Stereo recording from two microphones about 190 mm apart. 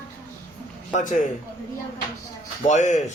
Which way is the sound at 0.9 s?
40° left (ahead or behind).